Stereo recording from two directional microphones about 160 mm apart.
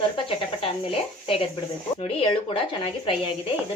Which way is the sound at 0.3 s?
35° left (ahead or behind).